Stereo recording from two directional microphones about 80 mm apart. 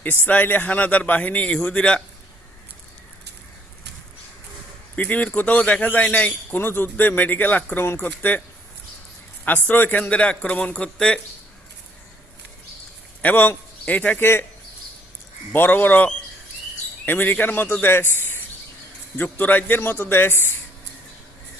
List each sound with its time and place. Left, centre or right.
0.0 s speech: left
4.9 s speech: centre
9.4 s a man's voice: left
13.2 s a man's voice: left
15.5 s speech: left